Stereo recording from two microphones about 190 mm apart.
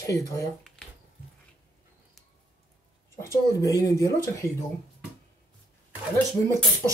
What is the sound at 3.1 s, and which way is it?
Speech, 15° left (ahead or behind).